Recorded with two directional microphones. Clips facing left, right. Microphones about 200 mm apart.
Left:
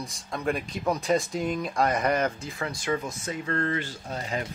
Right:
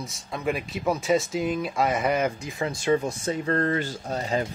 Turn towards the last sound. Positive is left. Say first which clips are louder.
# right 5 dB
turn(degrees=-35)  # may be behind; listen again after turning